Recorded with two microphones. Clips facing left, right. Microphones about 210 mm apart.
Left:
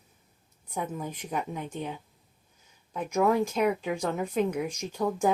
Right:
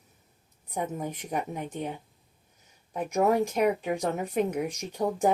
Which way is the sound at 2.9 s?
40° right (ahead or behind).